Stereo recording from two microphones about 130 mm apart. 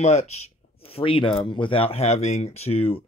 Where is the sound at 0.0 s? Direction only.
55° left (ahead or behind).